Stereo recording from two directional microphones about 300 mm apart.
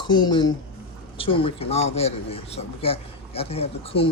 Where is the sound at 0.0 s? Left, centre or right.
Centre.